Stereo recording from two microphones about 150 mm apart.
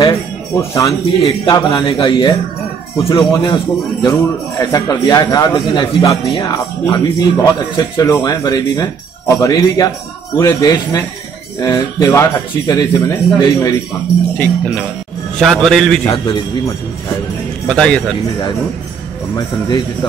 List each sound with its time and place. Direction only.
0.0 s speech: 20° left (ahead or behind)
1.4 s speech: 35° left (ahead or behind); by 14.9 s 15° left (ahead or behind)
15.3 s a man's voice: centre (ahead or behind)
17.6 s a man's voice: 5° left (ahead or behind)
19.3 s speech: 25° left (ahead or behind)